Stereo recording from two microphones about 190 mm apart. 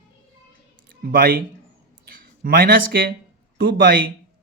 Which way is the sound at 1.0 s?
50° right (ahead or behind).